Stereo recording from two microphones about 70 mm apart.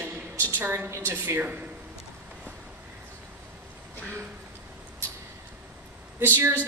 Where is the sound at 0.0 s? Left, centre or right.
Right.